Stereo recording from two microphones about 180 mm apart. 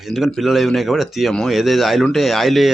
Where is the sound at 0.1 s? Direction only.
Centre (ahead or behind).